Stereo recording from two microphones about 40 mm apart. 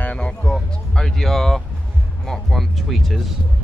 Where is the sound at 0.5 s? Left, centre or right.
Left.